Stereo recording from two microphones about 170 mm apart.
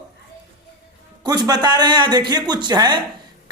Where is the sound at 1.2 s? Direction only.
25° right (ahead or behind).